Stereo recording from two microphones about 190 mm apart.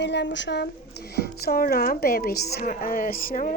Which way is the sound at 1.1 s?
55° left (ahead or behind).